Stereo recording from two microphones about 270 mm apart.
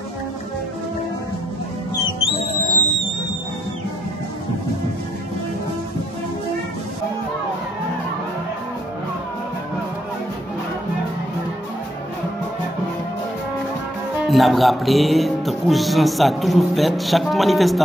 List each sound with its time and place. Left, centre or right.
2.4 s music: left
14.2 s music: centre